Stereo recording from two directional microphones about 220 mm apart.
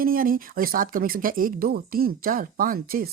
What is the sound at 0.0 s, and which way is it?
Speech, 40° right (ahead or behind).